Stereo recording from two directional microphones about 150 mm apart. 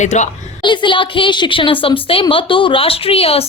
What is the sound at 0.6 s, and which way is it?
Speech, 30° left (ahead or behind).